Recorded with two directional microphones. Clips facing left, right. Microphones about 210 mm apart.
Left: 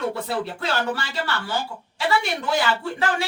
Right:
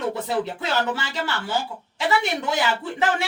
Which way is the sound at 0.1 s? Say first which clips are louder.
Right 2 dB; 20° right (ahead or behind).